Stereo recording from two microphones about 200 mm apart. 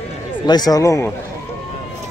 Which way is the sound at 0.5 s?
20° left (ahead or behind).